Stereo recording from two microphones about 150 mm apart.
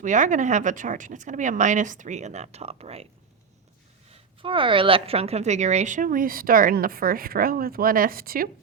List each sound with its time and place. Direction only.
0.0 s speech: 55° right (ahead or behind)
4.4 s a woman's voice: 35° right (ahead or behind); by 8.4 s 80° right